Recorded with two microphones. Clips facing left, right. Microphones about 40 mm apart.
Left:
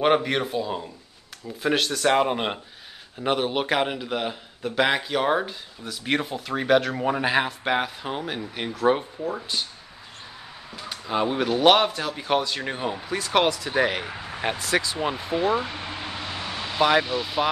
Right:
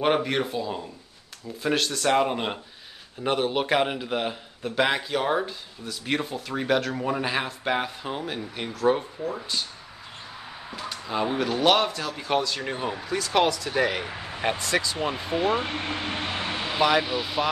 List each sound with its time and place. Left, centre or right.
0.0 s a man's voice: centre
10.9 s a sound: centre
11.6 s a man's voice: centre
13.0 s a man's voice: left
14.6 s a man's voice: centre
15.2 s speech: centre
15.6 s a sound: right
17.0 s speech: centre